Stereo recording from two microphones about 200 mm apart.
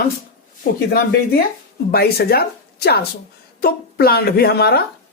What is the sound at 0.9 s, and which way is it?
Speech, 50° left (ahead or behind).